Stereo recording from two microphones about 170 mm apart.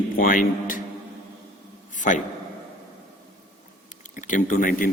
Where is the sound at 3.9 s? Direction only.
50° left (ahead or behind).